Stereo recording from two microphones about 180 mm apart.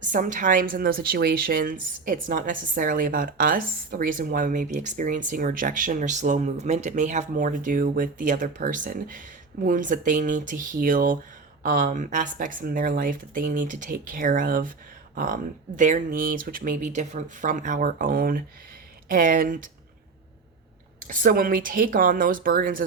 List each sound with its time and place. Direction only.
0.1 s a woman's voice: 45° right (ahead or behind)
21.1 s a woman's voice: 50° right (ahead or behind)